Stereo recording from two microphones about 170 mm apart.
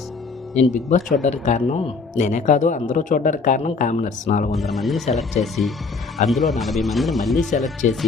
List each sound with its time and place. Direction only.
0.5 s speech: 40° left (ahead or behind)
4.5 s speech: centre (ahead or behind)
7.8 s speech: 45° left (ahead or behind)